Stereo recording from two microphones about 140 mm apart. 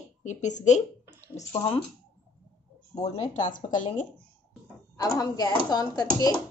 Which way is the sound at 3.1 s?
60° left (ahead or behind).